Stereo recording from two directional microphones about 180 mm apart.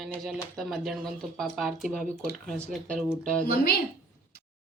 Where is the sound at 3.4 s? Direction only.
60° left (ahead or behind).